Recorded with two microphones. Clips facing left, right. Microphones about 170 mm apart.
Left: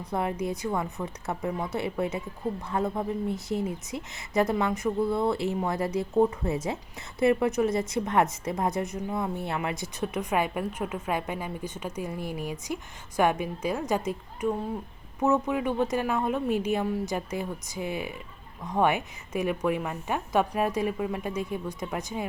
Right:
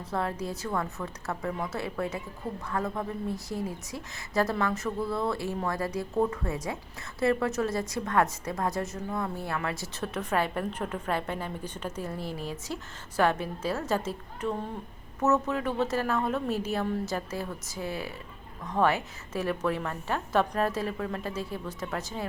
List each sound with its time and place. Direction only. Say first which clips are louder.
0.1 s a woman's voice: left 3 dB; 20° left (ahead or behind)